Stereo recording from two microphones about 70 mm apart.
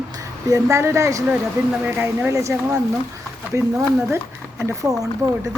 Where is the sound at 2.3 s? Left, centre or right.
Right.